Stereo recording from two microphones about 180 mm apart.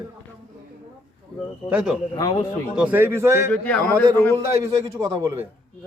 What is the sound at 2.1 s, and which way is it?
Speech, 20° left (ahead or behind).